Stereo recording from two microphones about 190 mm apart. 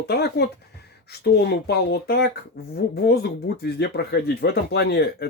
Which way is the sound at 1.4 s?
60° left (ahead or behind).